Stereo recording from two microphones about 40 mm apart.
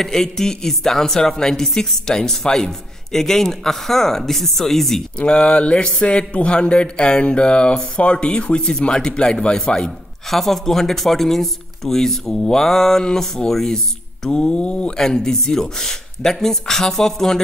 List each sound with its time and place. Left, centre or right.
0.0 s speech: centre
5.2 s speech: left
10.3 s speech: centre; by 15.0 s left
15.0 s speech: centre